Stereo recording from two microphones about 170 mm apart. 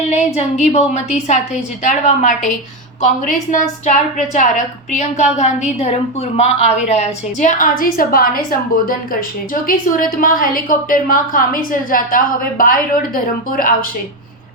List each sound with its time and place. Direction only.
0.1 s a woman's voice: 40° left (ahead or behind); by 13.7 s 55° left (ahead or behind)